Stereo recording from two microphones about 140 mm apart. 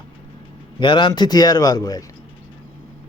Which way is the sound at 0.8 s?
35° left (ahead or behind).